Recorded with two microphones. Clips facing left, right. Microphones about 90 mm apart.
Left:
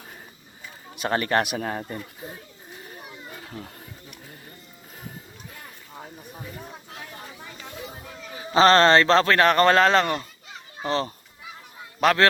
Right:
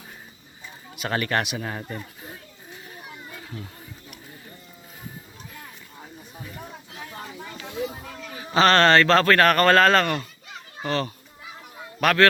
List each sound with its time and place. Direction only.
0.9 s speech: 35° left (ahead or behind)
8.4 s a man's voice: 30° left (ahead or behind)